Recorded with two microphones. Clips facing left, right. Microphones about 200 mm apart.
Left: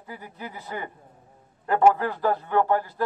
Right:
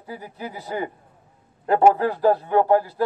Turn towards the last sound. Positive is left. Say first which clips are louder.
# right 6 dB
turn(degrees=-10)  # may be behind; listen again after turning